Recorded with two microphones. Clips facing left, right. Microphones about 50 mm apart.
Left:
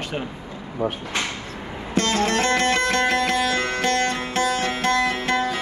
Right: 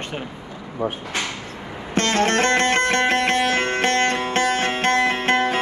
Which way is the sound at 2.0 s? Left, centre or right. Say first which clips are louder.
Right 2 dB; right.